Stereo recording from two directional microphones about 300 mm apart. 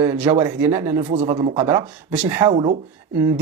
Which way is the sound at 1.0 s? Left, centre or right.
Centre.